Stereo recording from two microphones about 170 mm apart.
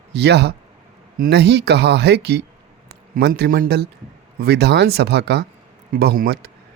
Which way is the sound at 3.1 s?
65° right (ahead or behind).